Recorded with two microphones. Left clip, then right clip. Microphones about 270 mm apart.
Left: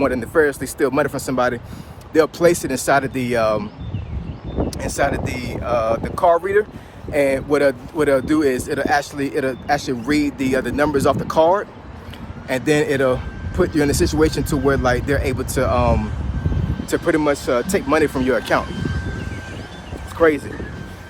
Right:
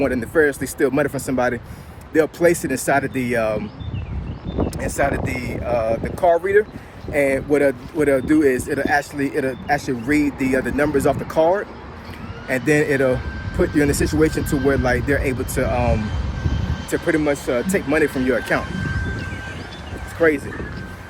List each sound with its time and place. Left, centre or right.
0.0 s speech: centre
4.9 s speech: centre
5.6 s speech: right
6.4 s speech: centre
18.6 s a sound: centre
20.1 s speech: centre